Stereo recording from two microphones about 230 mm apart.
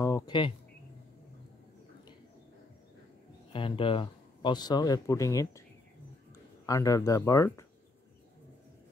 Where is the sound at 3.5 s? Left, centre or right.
Left.